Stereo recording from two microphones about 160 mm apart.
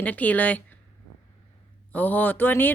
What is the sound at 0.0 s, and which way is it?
Speech, 10° left (ahead or behind).